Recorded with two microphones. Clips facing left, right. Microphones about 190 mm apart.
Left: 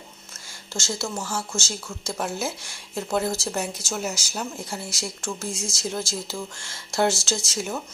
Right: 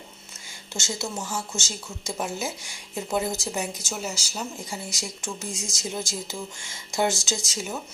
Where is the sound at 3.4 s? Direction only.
Centre (ahead or behind).